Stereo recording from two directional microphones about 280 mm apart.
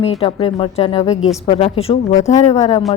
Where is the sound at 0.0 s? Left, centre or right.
Left.